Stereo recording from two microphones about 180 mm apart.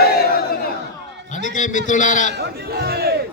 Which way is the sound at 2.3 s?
65° right (ahead or behind).